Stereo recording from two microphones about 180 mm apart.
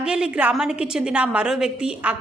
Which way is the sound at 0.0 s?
5° right (ahead or behind).